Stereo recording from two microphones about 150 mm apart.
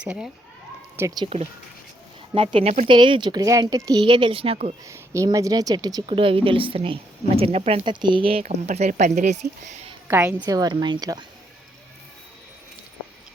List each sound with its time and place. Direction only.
0.0 s speech: 5° right (ahead or behind)
0.9 s speech: 20° right (ahead or behind)
1.2 s a woman's voice: 45° right (ahead or behind)
4.9 s a woman's voice: 20° right (ahead or behind); by 7.8 s 45° right (ahead or behind)
7.9 s speech: 30° right (ahead or behind); by 9.7 s 50° right (ahead or behind)
10.1 s a woman's voice: 15° right (ahead or behind)
10.4 s speech: 25° right (ahead or behind)